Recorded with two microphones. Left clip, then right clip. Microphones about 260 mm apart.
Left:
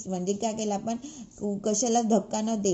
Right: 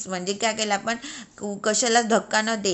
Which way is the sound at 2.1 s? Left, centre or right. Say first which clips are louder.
Right 5 dB; right.